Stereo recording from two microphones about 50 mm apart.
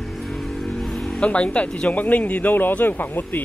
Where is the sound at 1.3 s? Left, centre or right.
Left.